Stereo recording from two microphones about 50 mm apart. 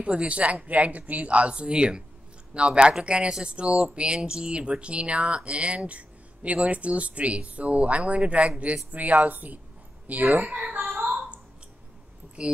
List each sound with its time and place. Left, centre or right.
0.0 s a woman's voice: right
11.0 s a sound: centre
12.4 s a woman's voice: centre